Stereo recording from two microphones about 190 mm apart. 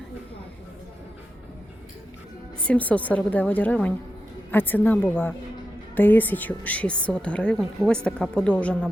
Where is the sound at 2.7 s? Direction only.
5° left (ahead or behind).